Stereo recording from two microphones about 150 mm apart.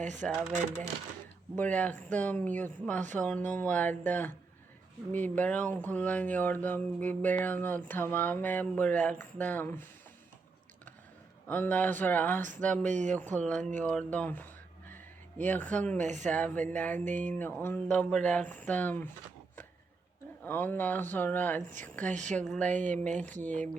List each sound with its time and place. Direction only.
0.2 s speech: 5° left (ahead or behind)
1.5 s speech: 10° left (ahead or behind)
11.4 s speech: 10° left (ahead or behind)
12.8 s speech: 55° right (ahead or behind)
13.1 s speech: 10° left (ahead or behind)
14.8 s a sound: 10° left (ahead or behind)
16.2 s speech: 10° left (ahead or behind)
20.4 s speech: 10° left (ahead or behind)
22.8 s speech: 55° right (ahead or behind)